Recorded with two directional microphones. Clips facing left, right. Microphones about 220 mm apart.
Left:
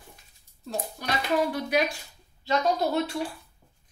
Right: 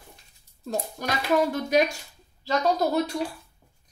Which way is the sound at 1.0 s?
45° right (ahead or behind).